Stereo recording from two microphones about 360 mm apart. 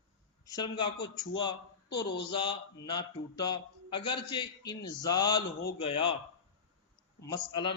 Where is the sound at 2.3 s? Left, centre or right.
Centre.